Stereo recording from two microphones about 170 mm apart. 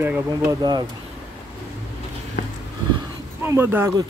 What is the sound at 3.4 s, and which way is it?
Speech, 15° right (ahead or behind).